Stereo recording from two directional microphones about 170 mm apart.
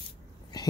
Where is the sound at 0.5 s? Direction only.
20° left (ahead or behind).